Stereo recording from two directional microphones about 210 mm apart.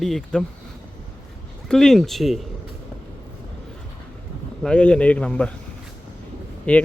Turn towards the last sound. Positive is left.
turn(degrees=5)  # may be behind; listen again after turning